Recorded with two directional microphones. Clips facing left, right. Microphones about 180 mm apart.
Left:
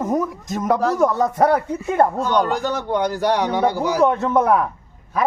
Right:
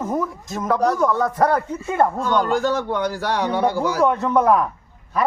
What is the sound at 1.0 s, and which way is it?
A man's voice, 20° left (ahead or behind).